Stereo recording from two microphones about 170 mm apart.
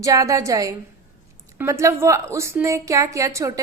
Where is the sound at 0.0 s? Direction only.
20° right (ahead or behind).